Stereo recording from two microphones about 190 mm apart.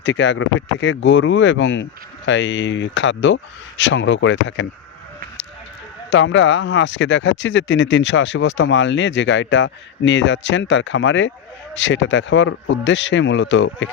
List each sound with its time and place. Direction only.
0.0 s speech: 70° left (ahead or behind)
6.1 s speech: 80° left